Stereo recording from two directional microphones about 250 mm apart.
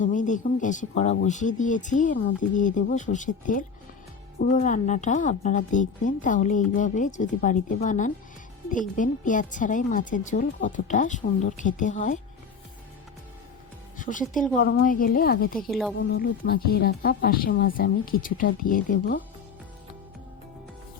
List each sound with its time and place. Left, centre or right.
0.0 s a woman's voice: left
14.0 s speech: left
14.6 s a woman's voice: left
14.8 s speech: left
15.5 s a woman's voice: centre
16.0 s speech: left